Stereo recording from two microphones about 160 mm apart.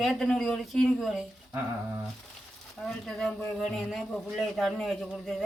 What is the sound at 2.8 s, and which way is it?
A man's voice, 5° left (ahead or behind).